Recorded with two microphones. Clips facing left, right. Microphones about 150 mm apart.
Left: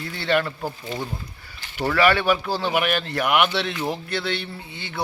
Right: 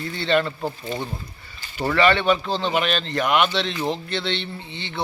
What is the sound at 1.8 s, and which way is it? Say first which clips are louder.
Speech: right 1 dB; 5° left (ahead or behind).